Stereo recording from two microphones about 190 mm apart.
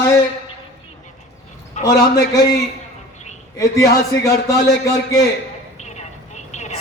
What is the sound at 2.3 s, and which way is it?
Speech, 20° left (ahead or behind).